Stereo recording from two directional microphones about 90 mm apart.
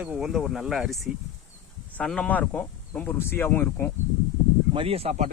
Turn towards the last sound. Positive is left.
turn(degrees=-90)